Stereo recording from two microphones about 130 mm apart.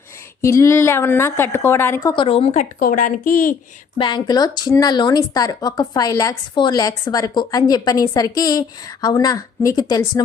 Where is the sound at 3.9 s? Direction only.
35° left (ahead or behind).